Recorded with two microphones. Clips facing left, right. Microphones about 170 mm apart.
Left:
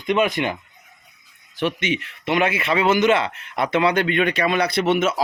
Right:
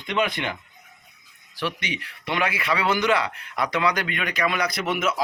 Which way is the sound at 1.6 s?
20° left (ahead or behind).